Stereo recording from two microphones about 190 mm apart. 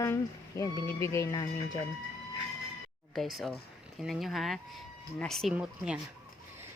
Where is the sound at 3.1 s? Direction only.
Centre (ahead or behind).